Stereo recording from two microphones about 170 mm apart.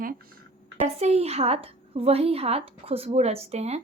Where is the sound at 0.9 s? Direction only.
40° right (ahead or behind).